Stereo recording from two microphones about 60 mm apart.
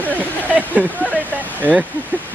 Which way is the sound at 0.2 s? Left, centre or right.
Right.